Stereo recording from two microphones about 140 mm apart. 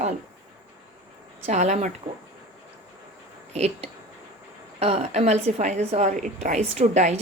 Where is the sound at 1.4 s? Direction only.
55° right (ahead or behind).